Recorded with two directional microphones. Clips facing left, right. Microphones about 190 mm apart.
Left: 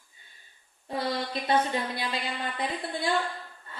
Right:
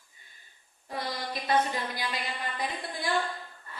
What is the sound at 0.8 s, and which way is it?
A woman's voice, 25° left (ahead or behind).